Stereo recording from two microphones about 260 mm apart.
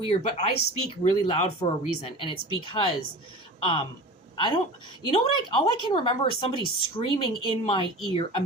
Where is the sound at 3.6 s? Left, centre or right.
Centre.